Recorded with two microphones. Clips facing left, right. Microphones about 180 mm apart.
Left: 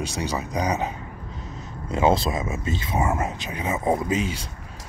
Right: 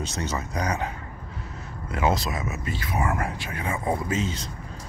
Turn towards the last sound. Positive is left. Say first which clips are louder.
# left 2 dB
turn(degrees=10)  # may be behind; listen again after turning